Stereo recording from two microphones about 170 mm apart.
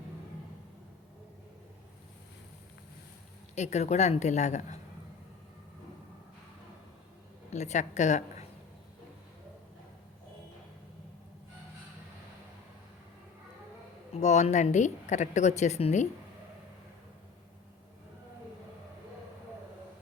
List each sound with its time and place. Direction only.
3.5 s a woman's voice: 40° left (ahead or behind)
7.5 s a woman's voice: 45° left (ahead or behind)
14.1 s a woman's voice: 45° left (ahead or behind)